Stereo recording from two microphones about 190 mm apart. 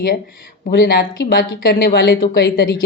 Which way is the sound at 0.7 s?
60° left (ahead or behind).